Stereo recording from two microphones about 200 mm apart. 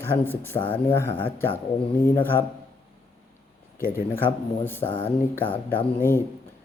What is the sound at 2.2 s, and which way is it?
Mantra, 10° left (ahead or behind).